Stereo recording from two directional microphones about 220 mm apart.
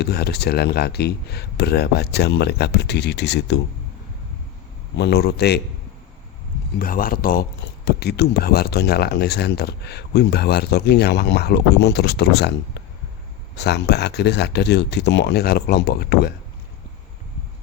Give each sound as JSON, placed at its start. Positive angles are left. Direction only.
{"t": 0.0, "sound": "speech", "side_deg": 45}
{"t": 4.9, "sound": "speech", "side_deg": 50}
{"t": 6.7, "sound": "speech", "side_deg": 40}